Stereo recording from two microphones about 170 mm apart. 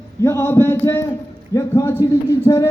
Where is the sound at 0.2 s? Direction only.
15° left (ahead or behind).